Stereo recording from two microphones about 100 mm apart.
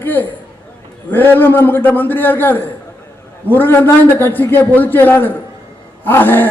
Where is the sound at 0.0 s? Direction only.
20° left (ahead or behind).